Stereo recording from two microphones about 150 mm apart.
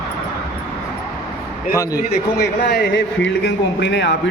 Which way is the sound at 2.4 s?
90° left.